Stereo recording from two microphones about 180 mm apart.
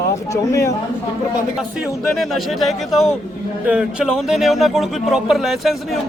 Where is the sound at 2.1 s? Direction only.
Centre (ahead or behind).